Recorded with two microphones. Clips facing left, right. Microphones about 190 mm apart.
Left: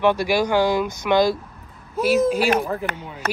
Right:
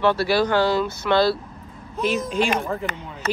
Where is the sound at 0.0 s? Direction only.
15° left (ahead or behind).